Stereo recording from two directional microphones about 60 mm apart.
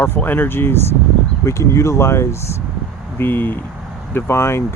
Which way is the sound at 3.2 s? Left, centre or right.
Left.